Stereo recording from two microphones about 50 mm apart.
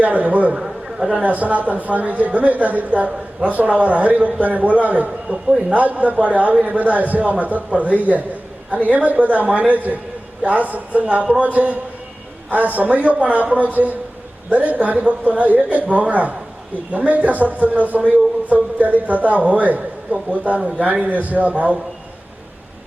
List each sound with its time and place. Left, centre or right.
0.0 s speech: right
0.5 s a man's voice: centre
1.2 s a man's voice: right
11.0 s a man's voice: centre